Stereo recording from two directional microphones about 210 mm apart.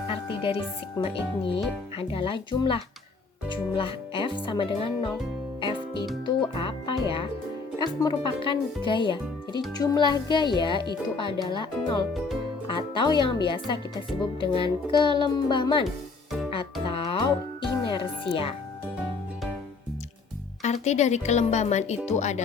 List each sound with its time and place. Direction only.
0.1 s speech: 25° left (ahead or behind)
5.5 s music: 25° left (ahead or behind)
6.5 s speech: 25° left (ahead or behind)
16.8 s music: 25° left (ahead or behind)
20.6 s speech: 35° left (ahead or behind)